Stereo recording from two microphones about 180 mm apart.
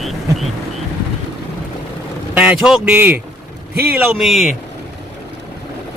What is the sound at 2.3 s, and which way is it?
Speech, 5° right (ahead or behind).